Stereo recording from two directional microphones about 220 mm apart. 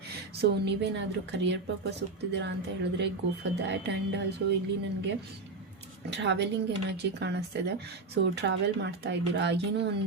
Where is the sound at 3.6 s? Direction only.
50° right (ahead or behind).